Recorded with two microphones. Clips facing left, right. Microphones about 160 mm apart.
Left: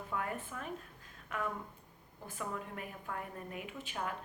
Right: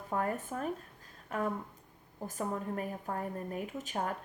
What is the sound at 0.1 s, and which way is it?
A woman's voice, 40° right (ahead or behind).